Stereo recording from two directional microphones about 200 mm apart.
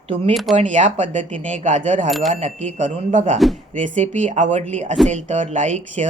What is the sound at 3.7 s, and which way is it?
Speech, 40° right (ahead or behind).